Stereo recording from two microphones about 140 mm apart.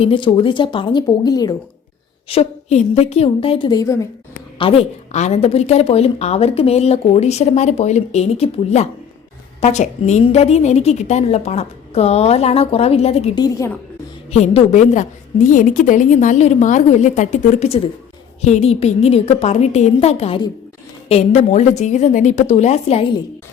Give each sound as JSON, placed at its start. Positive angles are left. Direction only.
{"t": 0.0, "sound": "a woman's voice", "side_deg": 35}
{"t": 2.3, "sound": "a woman's voice", "side_deg": 50}
{"t": 4.5, "sound": "a woman's voice", "side_deg": 40}
{"t": 13.3, "sound": "a woman's voice", "side_deg": 30}
{"t": 14.3, "sound": "a woman's voice", "side_deg": 50}